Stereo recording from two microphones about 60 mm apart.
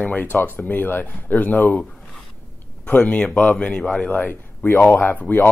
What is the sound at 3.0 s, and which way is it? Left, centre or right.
Speech, centre.